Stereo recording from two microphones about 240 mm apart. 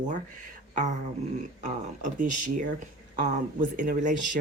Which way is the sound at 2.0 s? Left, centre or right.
Right.